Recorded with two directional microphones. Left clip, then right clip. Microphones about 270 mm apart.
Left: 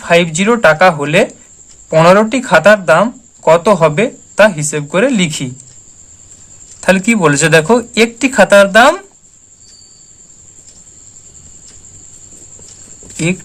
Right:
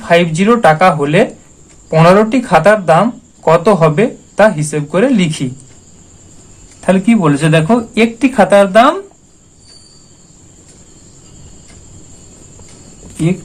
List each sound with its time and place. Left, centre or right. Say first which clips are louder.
0.0 s speech: even; left
6.8 s speech: left 2 dB; left